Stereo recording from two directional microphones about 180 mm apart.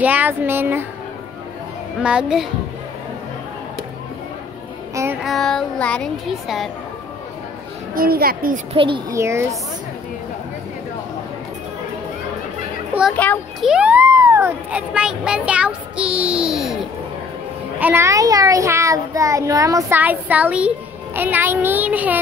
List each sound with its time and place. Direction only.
0.0 s a child's voice: 10° right (ahead or behind)
2.0 s speech: 5° right (ahead or behind)
5.2 s speech: centre (ahead or behind)
7.9 s a woman's voice: 55° right (ahead or behind)
8.7 s a child's voice: 30° right (ahead or behind)
9.1 s a child's voice: 15° right (ahead or behind)
13.1 s a child's voice: 10° left (ahead or behind)
13.7 s a child's voice: 5° right (ahead or behind)